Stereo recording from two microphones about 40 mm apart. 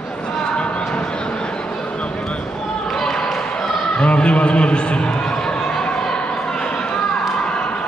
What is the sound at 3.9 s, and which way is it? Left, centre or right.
Speech, left.